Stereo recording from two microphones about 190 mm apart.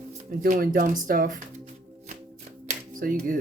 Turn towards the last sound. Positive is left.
turn(degrees=-45)  # may be behind; listen again after turning